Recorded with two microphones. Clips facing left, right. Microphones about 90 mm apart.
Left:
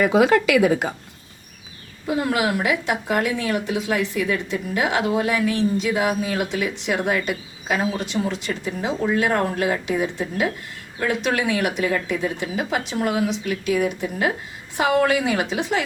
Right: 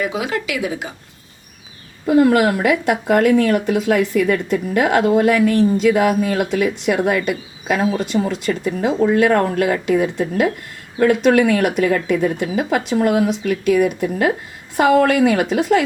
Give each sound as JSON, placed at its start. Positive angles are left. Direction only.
{"t": 0.1, "sound": "speech", "side_deg": 45}
{"t": 2.0, "sound": "a woman's voice", "side_deg": -55}